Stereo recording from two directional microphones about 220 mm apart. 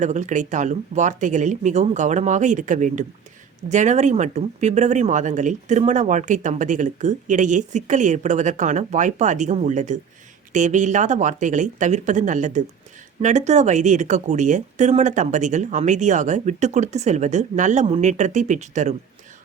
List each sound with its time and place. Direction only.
0.0 s speech: 35° right (ahead or behind)